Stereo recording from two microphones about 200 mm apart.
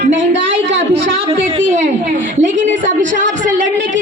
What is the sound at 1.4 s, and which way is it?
A woman's voice, 35° right (ahead or behind).